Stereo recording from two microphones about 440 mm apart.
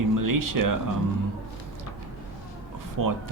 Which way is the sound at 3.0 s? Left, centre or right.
Right.